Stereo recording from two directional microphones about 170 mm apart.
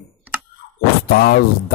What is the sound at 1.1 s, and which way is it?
Speech, 60° left (ahead or behind).